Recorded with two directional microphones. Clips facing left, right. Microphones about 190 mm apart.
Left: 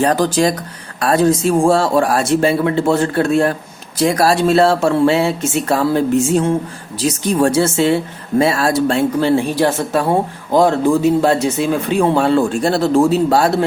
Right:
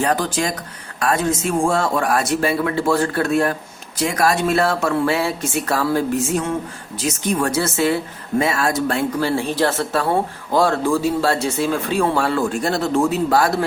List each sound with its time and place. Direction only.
0.0 s a woman's voice: 35° left (ahead or behind)